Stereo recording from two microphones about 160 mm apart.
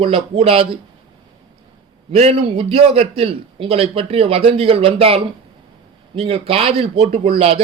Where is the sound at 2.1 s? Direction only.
40° right (ahead or behind).